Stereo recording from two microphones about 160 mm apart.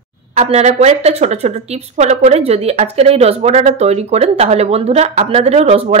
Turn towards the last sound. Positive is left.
turn(degrees=-40)  # may be behind; listen again after turning